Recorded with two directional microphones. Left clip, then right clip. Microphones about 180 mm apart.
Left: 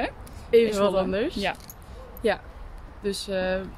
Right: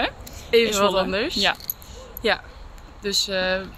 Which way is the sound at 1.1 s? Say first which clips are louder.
Right 5 dB; 10° left (ahead or behind).